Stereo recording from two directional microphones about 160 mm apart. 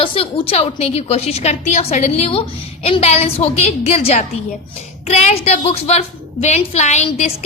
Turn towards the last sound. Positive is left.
turn(degrees=45)  # may be behind; listen again after turning